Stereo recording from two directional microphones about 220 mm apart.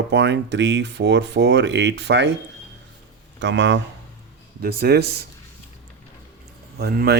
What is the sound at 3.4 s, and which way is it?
Speech, 55° right (ahead or behind).